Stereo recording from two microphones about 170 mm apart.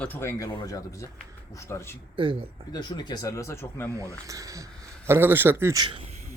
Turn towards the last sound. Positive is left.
turn(degrees=-25)  # may be behind; listen again after turning